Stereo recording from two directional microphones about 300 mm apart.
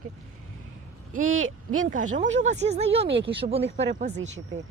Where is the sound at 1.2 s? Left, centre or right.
Right.